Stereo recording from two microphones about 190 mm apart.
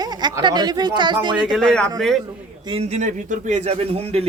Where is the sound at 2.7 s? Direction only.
35° right (ahead or behind).